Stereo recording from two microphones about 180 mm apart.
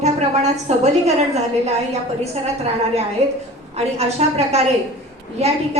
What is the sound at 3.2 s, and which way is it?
A woman's voice, 35° right (ahead or behind).